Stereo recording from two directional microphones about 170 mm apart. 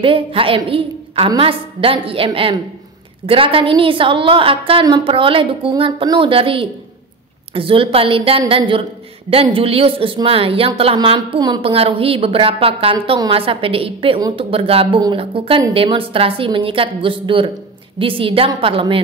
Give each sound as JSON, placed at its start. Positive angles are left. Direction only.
{"t": 0.0, "sound": "a woman's voice", "side_deg": -30}